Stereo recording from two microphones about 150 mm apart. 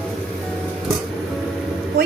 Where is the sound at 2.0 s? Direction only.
90° right.